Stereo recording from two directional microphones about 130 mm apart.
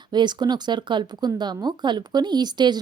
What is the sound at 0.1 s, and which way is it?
A woman's voice, 35° right (ahead or behind).